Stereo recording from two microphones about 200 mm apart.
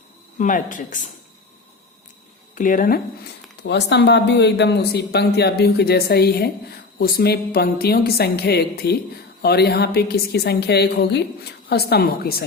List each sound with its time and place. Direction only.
0.3 s speech: 40° left (ahead or behind)
2.6 s speech: 40° left (ahead or behind)
3.6 s speech: 60° left (ahead or behind)